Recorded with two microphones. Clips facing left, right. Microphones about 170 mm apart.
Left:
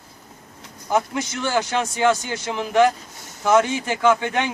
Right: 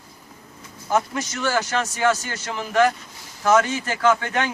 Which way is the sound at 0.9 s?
15° left (ahead or behind).